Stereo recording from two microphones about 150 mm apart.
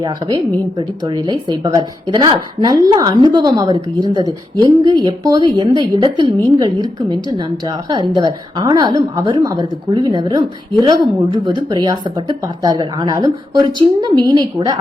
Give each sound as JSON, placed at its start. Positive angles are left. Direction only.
{"t": 0.0, "sound": "a woman's voice", "side_deg": -25}